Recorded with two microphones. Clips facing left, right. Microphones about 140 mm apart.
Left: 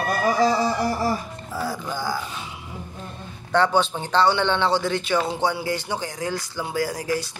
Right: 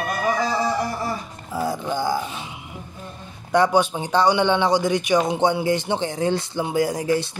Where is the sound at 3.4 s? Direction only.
10° right (ahead or behind).